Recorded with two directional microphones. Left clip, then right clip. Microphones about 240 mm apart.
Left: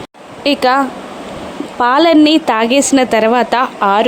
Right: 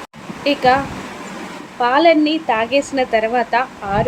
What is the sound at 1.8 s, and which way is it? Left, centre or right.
A woman's voice, left.